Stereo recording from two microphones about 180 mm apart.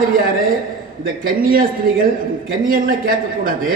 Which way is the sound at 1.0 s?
55° right (ahead or behind).